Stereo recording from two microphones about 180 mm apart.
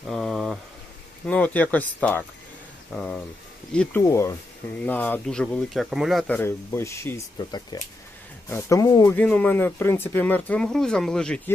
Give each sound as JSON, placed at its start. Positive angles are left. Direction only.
{"t": 0.1, "sound": "a sound", "side_deg": 0}
{"t": 1.3, "sound": "speech", "side_deg": 10}
{"t": 4.0, "sound": "speech", "side_deg": 20}
{"t": 9.1, "sound": "speech", "side_deg": 5}